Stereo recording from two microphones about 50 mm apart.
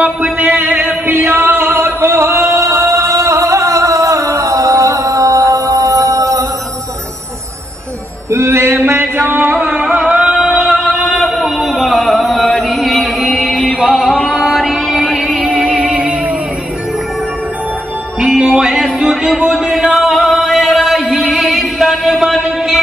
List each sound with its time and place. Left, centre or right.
0.4 s a sound: right
8.3 s a sound: right
9.6 s music: right
9.9 s singing: centre
10.6 s music: centre
11.1 s chant: centre
13.6 s music: centre
15.5 s a sound: centre
18.2 s music: right
18.6 s music: centre